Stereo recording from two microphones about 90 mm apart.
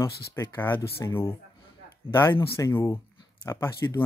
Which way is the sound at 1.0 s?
35° left (ahead or behind).